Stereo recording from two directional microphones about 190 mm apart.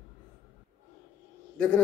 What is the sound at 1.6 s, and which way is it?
Speech, 5° left (ahead or behind).